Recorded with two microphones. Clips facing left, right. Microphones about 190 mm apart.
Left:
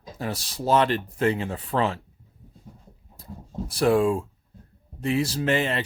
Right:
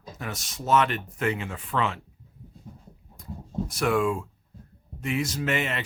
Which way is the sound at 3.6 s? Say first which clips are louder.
Left 5 dB; 30° left (ahead or behind).